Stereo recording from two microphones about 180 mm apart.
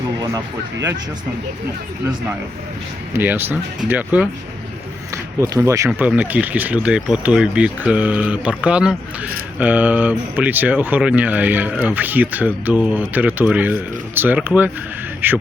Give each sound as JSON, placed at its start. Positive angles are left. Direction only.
{"t": 0.2, "sound": "speech", "side_deg": -20}
{"t": 3.1, "sound": "speech", "side_deg": -10}